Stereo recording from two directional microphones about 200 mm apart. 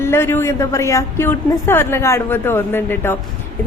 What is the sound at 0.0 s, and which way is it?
Speech, 10° left (ahead or behind).